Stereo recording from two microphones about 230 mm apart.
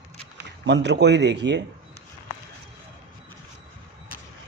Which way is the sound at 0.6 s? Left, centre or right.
Right.